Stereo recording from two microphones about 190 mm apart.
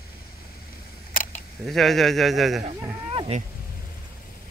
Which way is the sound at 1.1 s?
45° left (ahead or behind).